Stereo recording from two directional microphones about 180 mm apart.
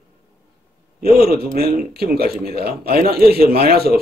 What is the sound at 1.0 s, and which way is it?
Speech, 60° right (ahead or behind).